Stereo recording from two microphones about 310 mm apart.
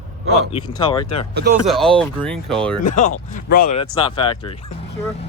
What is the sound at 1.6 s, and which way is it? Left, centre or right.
Speech, centre.